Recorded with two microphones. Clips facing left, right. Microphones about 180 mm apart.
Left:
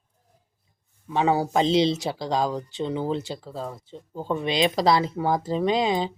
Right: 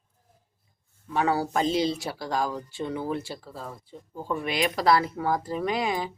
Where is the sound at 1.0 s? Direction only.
20° left (ahead or behind).